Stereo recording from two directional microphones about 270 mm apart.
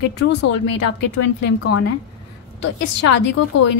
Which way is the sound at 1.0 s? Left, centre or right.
Left.